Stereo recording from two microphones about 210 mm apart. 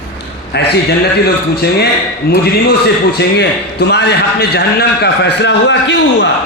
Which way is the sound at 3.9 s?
55° left (ahead or behind).